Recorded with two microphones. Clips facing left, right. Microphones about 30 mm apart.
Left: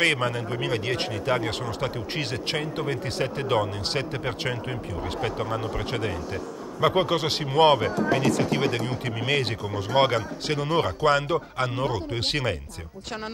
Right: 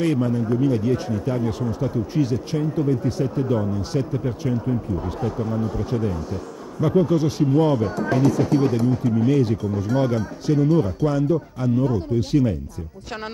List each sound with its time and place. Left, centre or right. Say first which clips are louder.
0.0 s speech: right 2 dB; left